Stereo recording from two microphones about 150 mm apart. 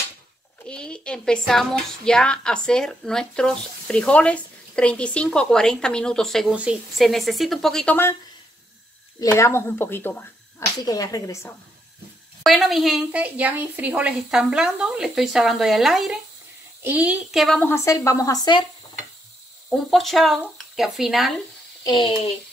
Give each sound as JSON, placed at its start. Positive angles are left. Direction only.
{"t": 0.7, "sound": "speech", "side_deg": 5}
{"t": 6.5, "sound": "speech", "side_deg": -5}
{"t": 9.2, "sound": "speech", "side_deg": 20}
{"t": 10.8, "sound": "speech", "side_deg": 25}
{"t": 12.4, "sound": "a child's voice", "side_deg": 0}
{"t": 17.6, "sound": "speech", "side_deg": 15}
{"t": 19.9, "sound": "speech", "side_deg": 0}
{"t": 21.8, "sound": "speech", "side_deg": 35}